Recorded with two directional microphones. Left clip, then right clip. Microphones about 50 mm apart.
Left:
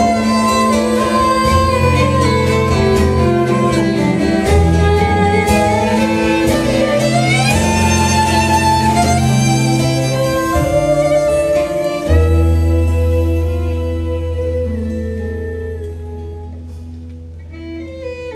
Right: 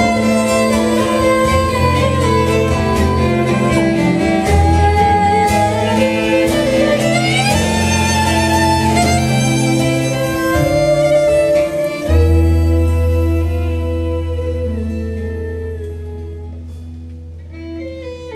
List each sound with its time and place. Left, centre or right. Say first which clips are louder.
0.0 s music: left 1 dB; right
0.9 s music: even; centre